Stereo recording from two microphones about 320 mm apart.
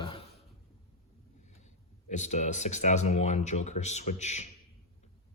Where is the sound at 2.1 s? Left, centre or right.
Left.